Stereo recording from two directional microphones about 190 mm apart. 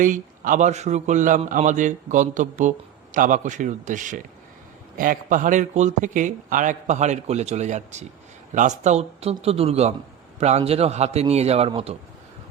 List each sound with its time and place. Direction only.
0.0 s a man's voice: 45° right (ahead or behind)